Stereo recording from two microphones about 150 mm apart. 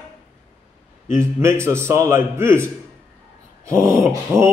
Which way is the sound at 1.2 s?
20° right (ahead or behind).